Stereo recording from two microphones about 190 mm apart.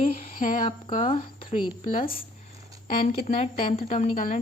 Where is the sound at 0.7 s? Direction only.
30° left (ahead or behind).